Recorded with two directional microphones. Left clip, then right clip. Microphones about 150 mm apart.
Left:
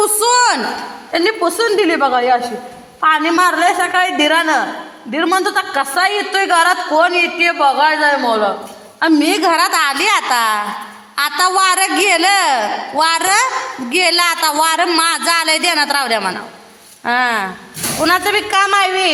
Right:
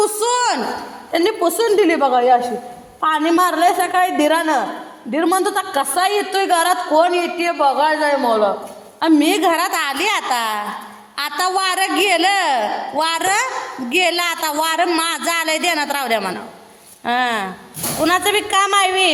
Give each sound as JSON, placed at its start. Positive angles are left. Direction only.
{"t": 0.2, "sound": "a sound", "side_deg": 5}
{"t": 1.1, "sound": "a woman's voice", "side_deg": -5}
{"t": 3.2, "sound": "a woman's voice", "side_deg": -30}
{"t": 9.2, "sound": "a woman's voice", "side_deg": 0}